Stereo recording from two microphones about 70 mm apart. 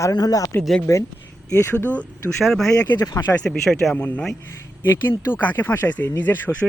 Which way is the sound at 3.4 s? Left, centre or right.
Centre.